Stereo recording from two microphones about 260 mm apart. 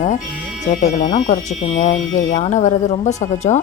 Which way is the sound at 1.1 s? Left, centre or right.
Left.